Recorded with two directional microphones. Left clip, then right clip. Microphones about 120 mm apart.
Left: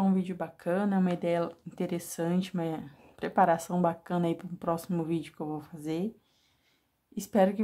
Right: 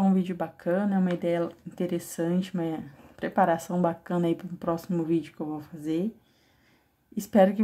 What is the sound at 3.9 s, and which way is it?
Speech, 10° left (ahead or behind).